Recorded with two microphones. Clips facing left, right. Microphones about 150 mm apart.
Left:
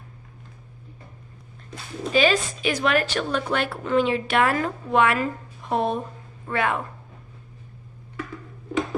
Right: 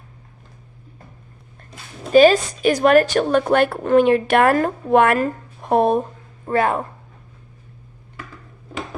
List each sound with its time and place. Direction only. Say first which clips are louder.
2.1 s a woman's voice: right 9 dB; 45° right (ahead or behind)
6.5 s speech: right 6 dB; 40° right (ahead or behind)